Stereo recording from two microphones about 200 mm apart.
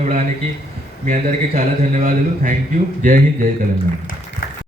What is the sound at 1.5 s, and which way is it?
Mantra, 35° right (ahead or behind).